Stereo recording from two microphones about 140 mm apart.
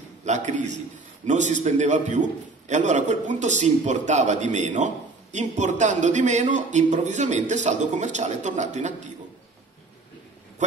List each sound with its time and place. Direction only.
0.5 s a man's voice: 60° right (ahead or behind)